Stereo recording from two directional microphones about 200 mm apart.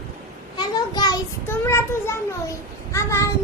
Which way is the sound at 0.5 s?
20° left (ahead or behind).